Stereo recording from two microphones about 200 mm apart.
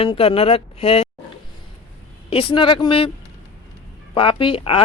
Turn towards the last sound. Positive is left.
turn(degrees=25)  # may be behind; listen again after turning